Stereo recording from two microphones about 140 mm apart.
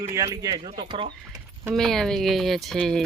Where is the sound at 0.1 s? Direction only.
20° right (ahead or behind).